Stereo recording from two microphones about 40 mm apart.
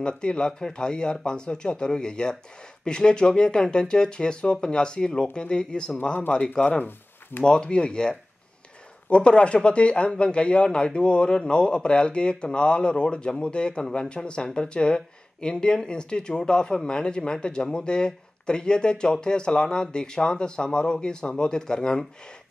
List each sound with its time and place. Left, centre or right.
0.0 s speech: left
0.5 s speech: centre